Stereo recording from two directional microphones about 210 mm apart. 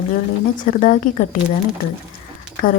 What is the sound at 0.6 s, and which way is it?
Speech, 40° left (ahead or behind).